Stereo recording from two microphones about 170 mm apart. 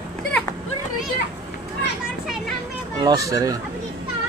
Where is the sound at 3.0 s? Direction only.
20° right (ahead or behind).